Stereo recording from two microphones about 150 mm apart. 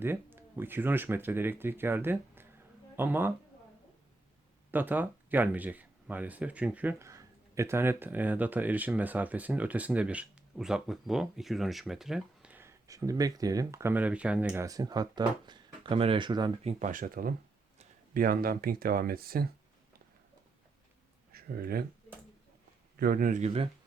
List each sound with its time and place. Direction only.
0.0 s speech: 15° right (ahead or behind)
4.7 s speech: 10° right (ahead or behind)
14.6 s speech: 25° right (ahead or behind)
16.6 s speech: 60° right (ahead or behind); by 19.5 s 85° right
21.3 s speech: 90° right
23.0 s a man's voice: 75° right (ahead or behind)
23.4 s speech: 40° right (ahead or behind)